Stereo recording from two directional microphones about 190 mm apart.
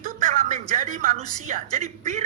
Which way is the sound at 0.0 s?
40° right (ahead or behind).